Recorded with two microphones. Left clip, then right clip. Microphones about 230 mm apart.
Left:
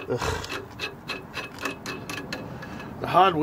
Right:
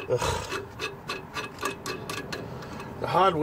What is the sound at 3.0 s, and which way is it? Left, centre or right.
Speech, left.